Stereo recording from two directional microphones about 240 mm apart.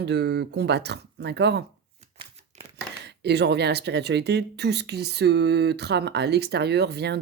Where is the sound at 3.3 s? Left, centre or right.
Right.